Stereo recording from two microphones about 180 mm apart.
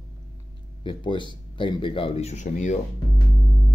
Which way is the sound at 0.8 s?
25° left (ahead or behind).